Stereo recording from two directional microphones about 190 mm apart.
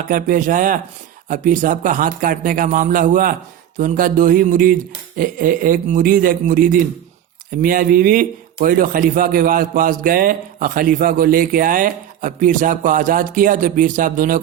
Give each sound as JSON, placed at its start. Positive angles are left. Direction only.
{"t": 0.1, "sound": "a man's voice", "side_deg": -45}